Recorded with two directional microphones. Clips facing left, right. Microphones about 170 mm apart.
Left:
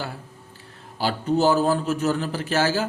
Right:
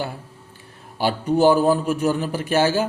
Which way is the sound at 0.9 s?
15° right (ahead or behind).